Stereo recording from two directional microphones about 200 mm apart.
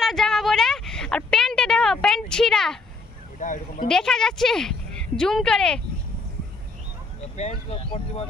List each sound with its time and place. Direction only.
0.0 s a sound: centre (ahead or behind)
3.3 s speech: 40° left (ahead or behind)
3.8 s a woman's voice: 5° left (ahead or behind)
7.7 s speech: 30° left (ahead or behind)